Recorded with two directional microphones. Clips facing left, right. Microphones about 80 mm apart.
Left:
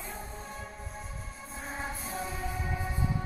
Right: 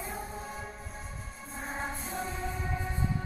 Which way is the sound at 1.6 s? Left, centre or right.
Centre.